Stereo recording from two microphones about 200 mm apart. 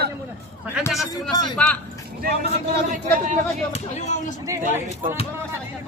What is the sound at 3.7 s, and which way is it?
Speech, 35° left (ahead or behind).